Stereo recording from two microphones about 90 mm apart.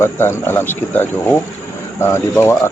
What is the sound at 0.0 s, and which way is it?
Speech, 25° left (ahead or behind).